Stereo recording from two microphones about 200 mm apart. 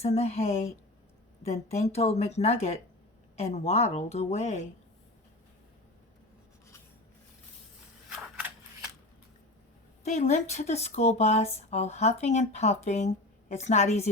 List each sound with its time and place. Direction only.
0.0 s speech: 30° left (ahead or behind)
10.0 s speech: 35° left (ahead or behind)